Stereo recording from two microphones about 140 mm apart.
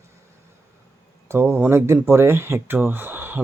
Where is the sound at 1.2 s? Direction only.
15° right (ahead or behind).